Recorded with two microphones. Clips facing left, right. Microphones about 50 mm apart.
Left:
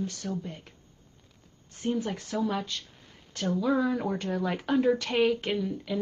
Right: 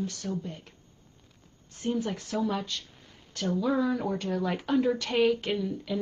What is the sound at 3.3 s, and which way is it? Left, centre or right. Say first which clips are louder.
Speech: even; left.